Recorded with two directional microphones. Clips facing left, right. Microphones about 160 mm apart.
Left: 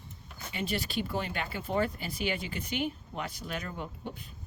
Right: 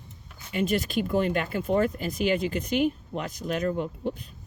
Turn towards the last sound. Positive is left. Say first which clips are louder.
# right 12 dB
turn(degrees=-40)  # may be behind; listen again after turning